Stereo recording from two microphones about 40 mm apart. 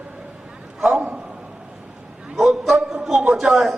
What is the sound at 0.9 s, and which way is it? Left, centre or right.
Speech, right.